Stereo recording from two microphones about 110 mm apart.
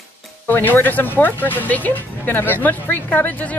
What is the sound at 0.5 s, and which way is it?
Speech, 20° left (ahead or behind).